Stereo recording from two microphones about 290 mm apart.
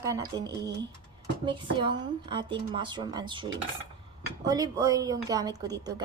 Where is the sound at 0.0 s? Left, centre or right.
Centre.